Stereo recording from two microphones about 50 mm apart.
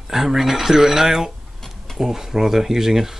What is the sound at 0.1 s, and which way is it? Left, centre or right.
Speech, centre.